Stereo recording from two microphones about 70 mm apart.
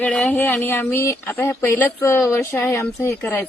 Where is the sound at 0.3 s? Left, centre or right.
Left.